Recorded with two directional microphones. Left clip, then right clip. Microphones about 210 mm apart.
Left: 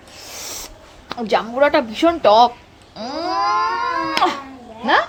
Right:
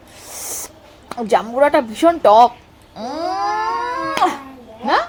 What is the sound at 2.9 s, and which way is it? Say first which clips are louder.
Speech: even; 20° right (ahead or behind).